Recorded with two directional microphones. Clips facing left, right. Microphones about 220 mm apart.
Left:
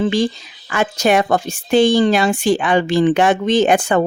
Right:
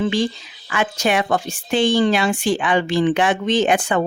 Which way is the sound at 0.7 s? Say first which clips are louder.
Left 4 dB; 40° left (ahead or behind).